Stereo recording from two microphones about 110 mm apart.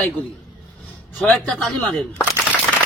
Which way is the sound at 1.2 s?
10° left (ahead or behind).